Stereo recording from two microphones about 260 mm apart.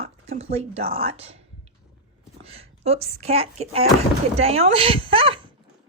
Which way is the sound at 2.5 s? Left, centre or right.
Right.